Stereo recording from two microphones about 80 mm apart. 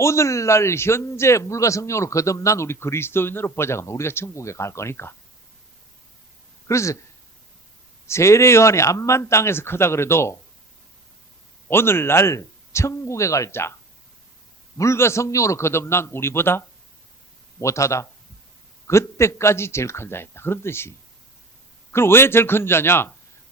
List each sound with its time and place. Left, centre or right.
0.0 s a man's voice: left
6.7 s a man's voice: left
8.0 s a man's voice: left
11.7 s a man's voice: left
14.8 s a man's voice: left
21.9 s a man's voice: left